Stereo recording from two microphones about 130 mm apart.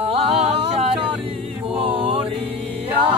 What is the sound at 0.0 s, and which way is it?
Music, 55° right (ahead or behind).